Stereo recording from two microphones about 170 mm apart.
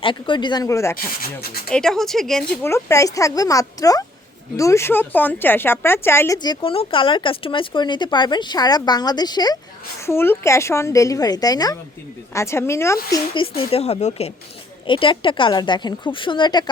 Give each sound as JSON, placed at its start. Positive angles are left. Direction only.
{"t": 0.0, "sound": "speech", "side_deg": 30}
{"t": 0.9, "sound": "speech", "side_deg": 60}
{"t": 1.7, "sound": "speech", "side_deg": 5}
{"t": 2.6, "sound": "speech", "side_deg": 15}
{"t": 13.6, "sound": "speech", "side_deg": 35}